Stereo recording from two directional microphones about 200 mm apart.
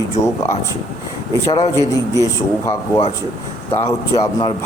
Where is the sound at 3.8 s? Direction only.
15° left (ahead or behind).